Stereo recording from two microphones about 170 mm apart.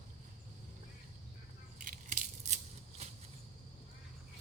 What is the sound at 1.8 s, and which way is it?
Scissors, 50° right (ahead or behind).